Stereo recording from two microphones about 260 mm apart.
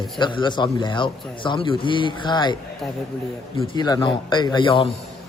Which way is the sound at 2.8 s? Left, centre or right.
Centre.